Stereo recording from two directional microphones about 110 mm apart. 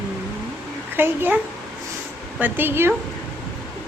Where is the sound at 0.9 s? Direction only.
20° right (ahead or behind).